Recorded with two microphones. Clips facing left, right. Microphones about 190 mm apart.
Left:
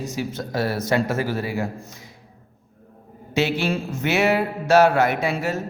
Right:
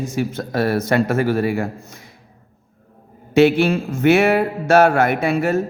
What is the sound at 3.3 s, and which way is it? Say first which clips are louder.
A man's voice: right 8 dB; 55° right (ahead or behind).